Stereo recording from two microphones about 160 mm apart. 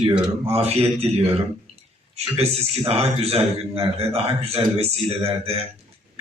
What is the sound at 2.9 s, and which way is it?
A man's voice, 40° right (ahead or behind).